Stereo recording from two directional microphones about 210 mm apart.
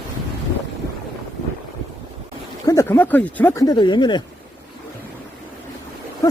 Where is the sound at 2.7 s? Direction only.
15° left (ahead or behind).